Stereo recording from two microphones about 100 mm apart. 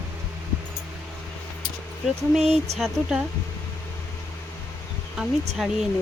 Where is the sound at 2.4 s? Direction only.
90° right.